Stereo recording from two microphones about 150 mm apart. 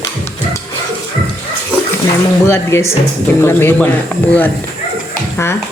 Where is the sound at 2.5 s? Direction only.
15° left (ahead or behind).